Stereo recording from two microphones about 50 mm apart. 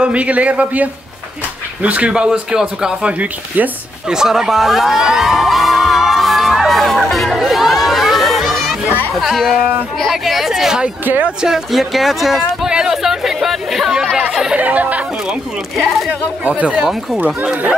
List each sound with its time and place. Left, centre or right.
0.0 s speech: right
4.1 s music: centre
9.1 s speech: centre
10.1 s hubbub: centre
11.4 s speech: centre
12.6 s chatter: centre
14.1 s chatter: centre
14.6 s a sound: right
16.4 s speech: right
16.7 s speech: centre
17.2 s speech: right